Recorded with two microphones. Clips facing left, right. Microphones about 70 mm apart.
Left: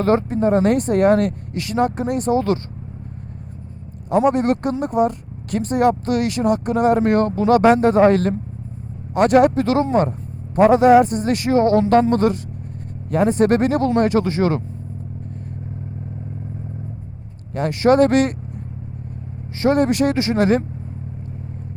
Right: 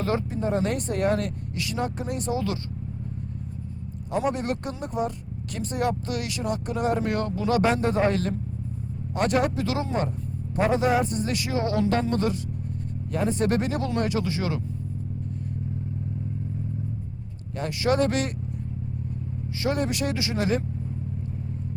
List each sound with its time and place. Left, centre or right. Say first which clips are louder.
0.0 s speech: left 9 dB; left
4.3 s speech: left 10 dB; left
17.5 s speech: left 9 dB; left
19.6 s speech: left 10 dB; left